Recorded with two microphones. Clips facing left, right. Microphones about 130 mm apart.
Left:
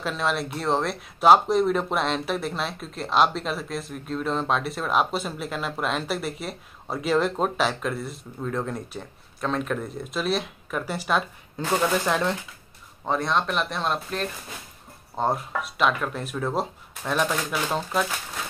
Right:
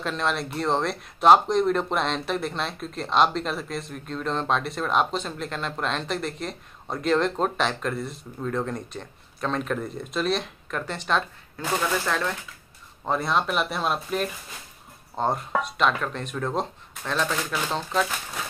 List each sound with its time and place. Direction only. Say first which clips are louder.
0.0 s speech: left 1 dB; centre (ahead or behind)
11.6 s speech: left 3 dB; 20° left (ahead or behind)
13.0 s speech: even; centre (ahead or behind)